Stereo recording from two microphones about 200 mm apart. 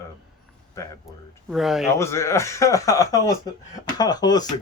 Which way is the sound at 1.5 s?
Centre (ahead or behind).